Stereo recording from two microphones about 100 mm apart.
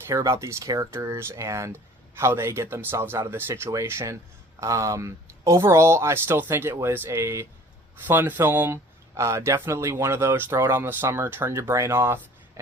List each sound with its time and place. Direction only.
0.0 s speech: 30° right (ahead or behind)